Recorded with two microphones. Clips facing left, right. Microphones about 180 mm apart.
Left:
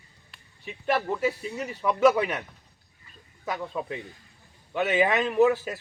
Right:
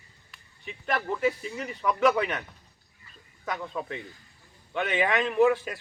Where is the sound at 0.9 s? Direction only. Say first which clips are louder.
Left 2 dB; 5° left (ahead or behind).